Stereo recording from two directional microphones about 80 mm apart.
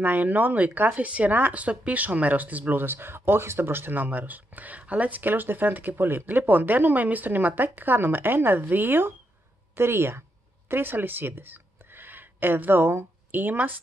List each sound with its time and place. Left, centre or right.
0.0 s speech: right